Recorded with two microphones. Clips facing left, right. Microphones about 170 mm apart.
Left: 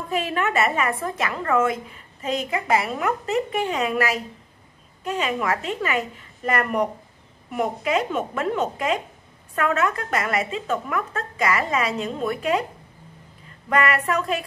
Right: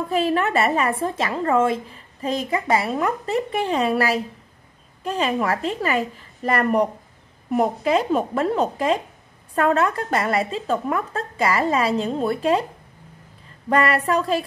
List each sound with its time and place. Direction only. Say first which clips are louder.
0.1 s a woman's voice: right 3 dB; 35° right (ahead or behind)
13.7 s a woman's voice: right 2 dB; 30° right (ahead or behind)